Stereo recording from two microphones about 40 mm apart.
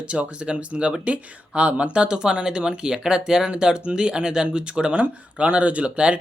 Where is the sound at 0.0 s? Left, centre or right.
Right.